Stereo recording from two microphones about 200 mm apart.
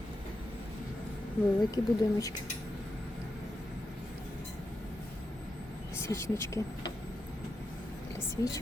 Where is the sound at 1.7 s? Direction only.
15° left (ahead or behind).